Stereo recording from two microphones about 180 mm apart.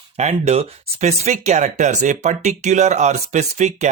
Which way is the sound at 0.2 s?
35° right (ahead or behind).